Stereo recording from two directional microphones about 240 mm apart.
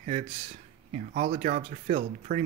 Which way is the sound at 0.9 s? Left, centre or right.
Right.